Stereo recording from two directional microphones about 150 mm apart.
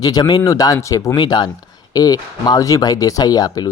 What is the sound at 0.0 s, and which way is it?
Speech, 25° left (ahead or behind).